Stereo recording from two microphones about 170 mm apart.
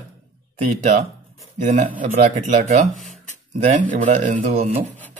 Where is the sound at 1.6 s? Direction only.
45° right (ahead or behind).